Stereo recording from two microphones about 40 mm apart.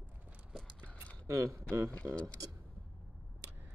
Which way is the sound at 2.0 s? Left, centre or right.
Right.